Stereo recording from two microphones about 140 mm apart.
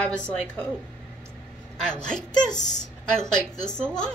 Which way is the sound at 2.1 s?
5° left (ahead or behind).